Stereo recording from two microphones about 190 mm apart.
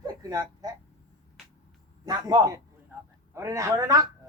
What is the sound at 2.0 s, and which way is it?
A man's voice, 20° right (ahead or behind).